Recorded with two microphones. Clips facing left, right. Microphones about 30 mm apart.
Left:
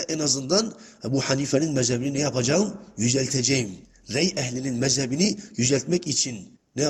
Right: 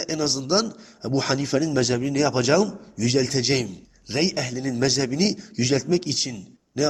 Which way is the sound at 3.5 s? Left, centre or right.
Centre.